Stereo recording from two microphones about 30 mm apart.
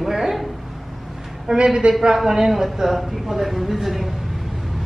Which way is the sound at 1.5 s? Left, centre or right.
Right.